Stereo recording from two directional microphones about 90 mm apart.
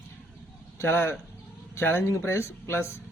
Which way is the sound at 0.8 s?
25° left (ahead or behind).